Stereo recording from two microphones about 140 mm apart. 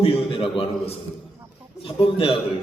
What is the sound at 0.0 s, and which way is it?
Speech, 40° left (ahead or behind).